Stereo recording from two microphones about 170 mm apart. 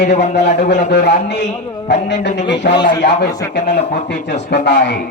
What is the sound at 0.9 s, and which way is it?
A man's voice, 90° left.